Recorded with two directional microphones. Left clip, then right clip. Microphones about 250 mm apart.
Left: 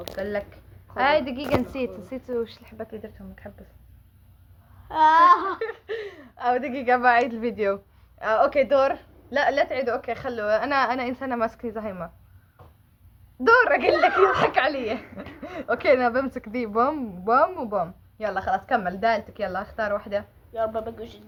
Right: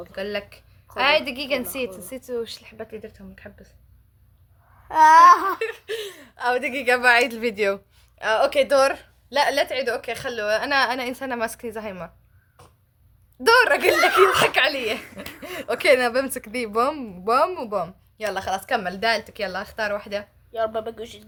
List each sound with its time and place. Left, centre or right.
0.2 s speech: right
4.9 s a woman's voice: centre
13.4 s speech: right